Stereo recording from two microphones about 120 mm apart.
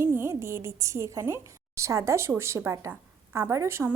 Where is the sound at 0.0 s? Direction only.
20° right (ahead or behind).